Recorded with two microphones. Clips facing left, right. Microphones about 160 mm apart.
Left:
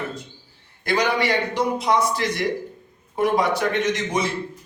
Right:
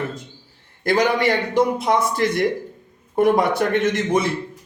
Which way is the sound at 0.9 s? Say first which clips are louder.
Right 3 dB; 50° right (ahead or behind).